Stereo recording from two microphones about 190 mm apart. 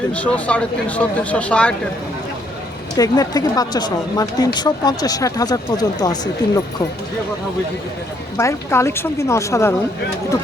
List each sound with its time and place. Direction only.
0.1 s speech: 5° left (ahead or behind)
2.9 s speech: 20° left (ahead or behind)
8.4 s speech: 15° left (ahead or behind)